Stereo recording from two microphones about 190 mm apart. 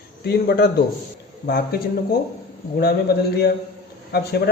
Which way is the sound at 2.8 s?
55° left (ahead or behind).